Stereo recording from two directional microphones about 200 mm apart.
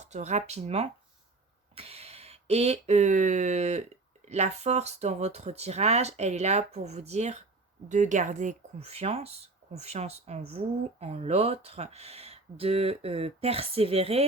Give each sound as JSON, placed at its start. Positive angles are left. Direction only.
{"t": 0.0, "sound": "speech", "side_deg": -35}